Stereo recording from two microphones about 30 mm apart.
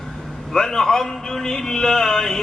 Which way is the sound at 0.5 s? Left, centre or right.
Centre.